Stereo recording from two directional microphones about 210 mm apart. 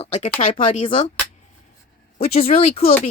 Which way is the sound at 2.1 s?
35° left (ahead or behind).